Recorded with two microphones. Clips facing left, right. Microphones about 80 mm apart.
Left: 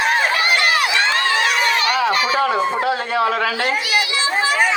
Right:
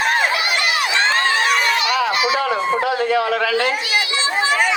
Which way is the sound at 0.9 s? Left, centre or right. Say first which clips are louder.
Right 1 dB; right.